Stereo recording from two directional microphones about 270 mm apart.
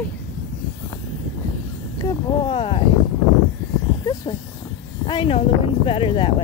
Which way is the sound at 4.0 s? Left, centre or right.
Centre.